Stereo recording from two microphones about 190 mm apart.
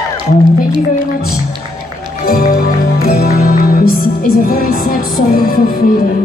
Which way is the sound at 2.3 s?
50° left (ahead or behind).